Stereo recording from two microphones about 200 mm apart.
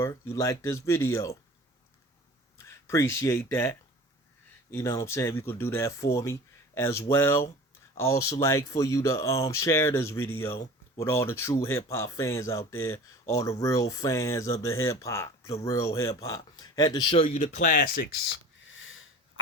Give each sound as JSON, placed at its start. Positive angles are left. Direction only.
{"t": 0.0, "sound": "speech", "side_deg": 15}
{"t": 2.6, "sound": "speech", "side_deg": 15}
{"t": 18.6, "sound": "sniff", "side_deg": 75}